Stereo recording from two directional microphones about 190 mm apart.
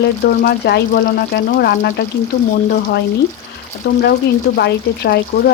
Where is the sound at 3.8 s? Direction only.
55° left (ahead or behind).